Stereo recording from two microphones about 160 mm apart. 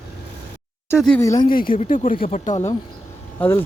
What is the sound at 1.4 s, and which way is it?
Speech, 65° left (ahead or behind).